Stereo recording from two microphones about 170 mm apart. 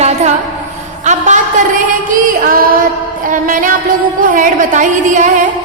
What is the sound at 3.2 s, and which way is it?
Music, 50° right (ahead or behind).